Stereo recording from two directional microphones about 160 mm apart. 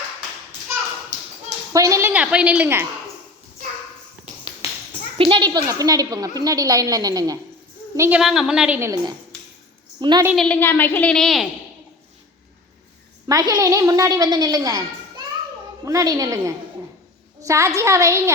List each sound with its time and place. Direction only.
1.7 s a woman's voice: 20° right (ahead or behind)
4.6 s a sound: 40° left (ahead or behind)
5.1 s a woman's voice: 30° right (ahead or behind); by 8.2 s 15° right (ahead or behind)
8.2 s a woman's voice: centre (ahead or behind)
8.8 s a woman's voice: 20° right (ahead or behind)
10.3 s a woman's voice: 5° left (ahead or behind)
13.2 s a woman's voice: 25° right (ahead or behind)
15.8 s a woman's voice: 20° right (ahead or behind)